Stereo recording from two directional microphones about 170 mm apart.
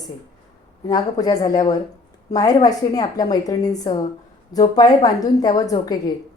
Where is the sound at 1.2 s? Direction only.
20° left (ahead or behind).